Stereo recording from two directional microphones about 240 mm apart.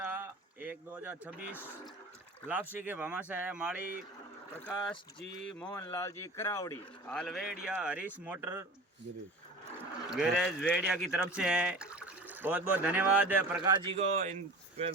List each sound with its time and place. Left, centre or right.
0.0 s a sound: centre
2.7 s speech: centre
5.4 s speech: centre
10.1 s speech: centre
13.8 s speech: right